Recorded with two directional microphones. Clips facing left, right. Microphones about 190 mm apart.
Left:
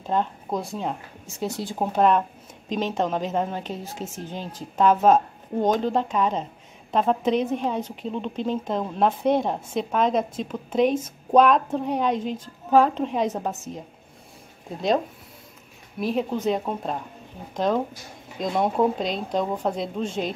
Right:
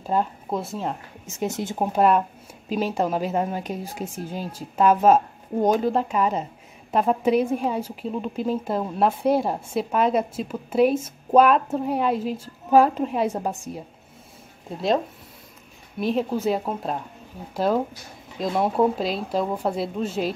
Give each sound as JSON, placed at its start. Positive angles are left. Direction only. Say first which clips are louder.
{"t": 0.0, "sound": "speech", "louder": "right 1 dB", "side_deg": -5}
{"t": 1.2, "sound": "speech", "louder": "right 2 dB", "side_deg": -20}
{"t": 1.8, "sound": "a woman's voice", "louder": "right 1 dB", "side_deg": -5}
{"t": 16.0, "sound": "a woman's voice", "louder": "right 1 dB", "side_deg": 0}